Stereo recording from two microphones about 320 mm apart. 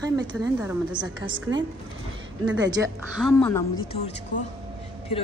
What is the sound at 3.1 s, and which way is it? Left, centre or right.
Speech, centre.